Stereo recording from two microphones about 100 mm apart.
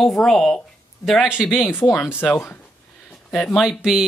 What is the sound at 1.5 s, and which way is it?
Speech, 20° left (ahead or behind).